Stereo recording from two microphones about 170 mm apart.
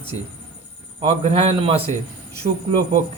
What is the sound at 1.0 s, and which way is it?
Speech, 35° right (ahead or behind).